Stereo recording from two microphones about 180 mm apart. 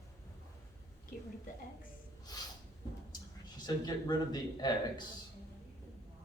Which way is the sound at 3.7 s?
25° left (ahead or behind).